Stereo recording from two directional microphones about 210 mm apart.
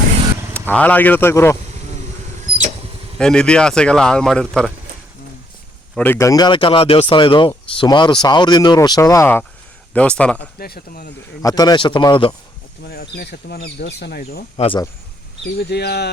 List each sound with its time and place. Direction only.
0.7 s speech: 5° left (ahead or behind)
3.2 s speech: 5° left (ahead or behind)
5.9 s speech: 10° left (ahead or behind)
10.6 s speech: 45° left (ahead or behind)
11.4 s speech: 20° left (ahead or behind)
12.8 s speech: 45° left (ahead or behind)
14.5 s speech: 25° left (ahead or behind)
15.5 s speech: 50° left (ahead or behind)